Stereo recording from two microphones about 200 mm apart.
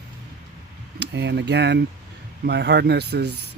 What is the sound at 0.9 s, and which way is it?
Speech, 60° right (ahead or behind).